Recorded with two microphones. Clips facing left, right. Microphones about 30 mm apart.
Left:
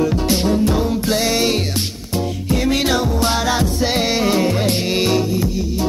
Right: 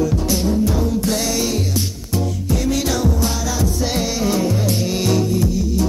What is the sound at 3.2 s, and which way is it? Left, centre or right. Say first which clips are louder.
Music: left 4 dB; left.